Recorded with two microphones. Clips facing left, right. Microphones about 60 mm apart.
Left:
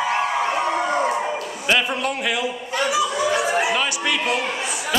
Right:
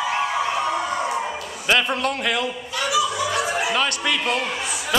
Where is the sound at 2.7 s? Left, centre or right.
Left.